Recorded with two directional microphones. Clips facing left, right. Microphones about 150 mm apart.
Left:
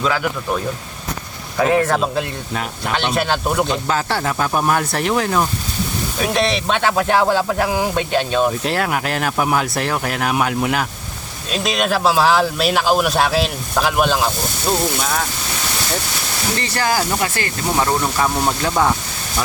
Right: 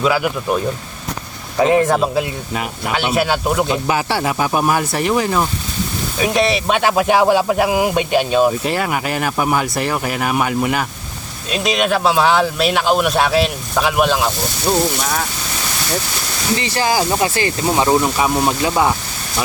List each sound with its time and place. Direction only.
0.0 s speech: 10° right (ahead or behind)
2.0 s speech: 5° right (ahead or behind)
16.6 s speech: 15° right (ahead or behind)